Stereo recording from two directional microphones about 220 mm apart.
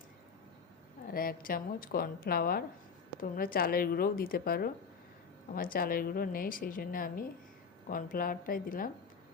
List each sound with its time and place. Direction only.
1.1 s a woman's voice: 40° left (ahead or behind)